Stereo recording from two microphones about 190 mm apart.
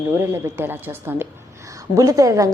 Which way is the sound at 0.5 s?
10° right (ahead or behind).